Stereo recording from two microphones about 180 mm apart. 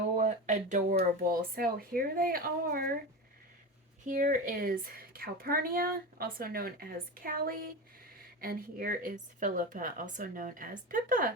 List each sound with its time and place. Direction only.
0.2 s a woman's voice: 45° right (ahead or behind)
4.0 s a woman's voice: 50° right (ahead or behind)